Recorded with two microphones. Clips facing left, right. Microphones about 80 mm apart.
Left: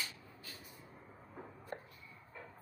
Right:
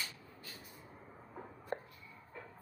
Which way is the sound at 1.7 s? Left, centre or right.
Right.